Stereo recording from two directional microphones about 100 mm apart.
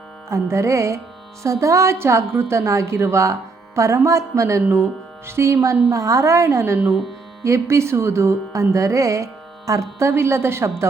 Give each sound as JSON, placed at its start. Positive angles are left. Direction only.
{"t": 0.3, "sound": "speech", "side_deg": -30}